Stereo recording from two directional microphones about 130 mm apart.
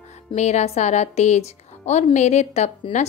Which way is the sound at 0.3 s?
60° left (ahead or behind).